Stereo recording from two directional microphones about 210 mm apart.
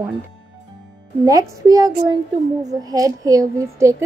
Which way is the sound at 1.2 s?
15° right (ahead or behind).